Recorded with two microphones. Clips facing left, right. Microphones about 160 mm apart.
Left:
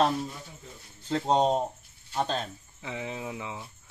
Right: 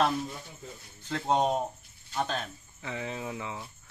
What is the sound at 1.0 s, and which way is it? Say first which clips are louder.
Speech: left 3 dB; 30° left (ahead or behind).